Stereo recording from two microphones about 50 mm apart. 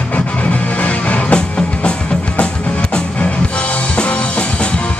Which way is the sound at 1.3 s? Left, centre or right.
Centre.